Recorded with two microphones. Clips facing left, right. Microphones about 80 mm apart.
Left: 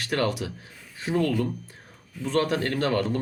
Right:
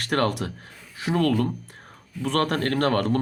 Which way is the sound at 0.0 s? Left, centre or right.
Right.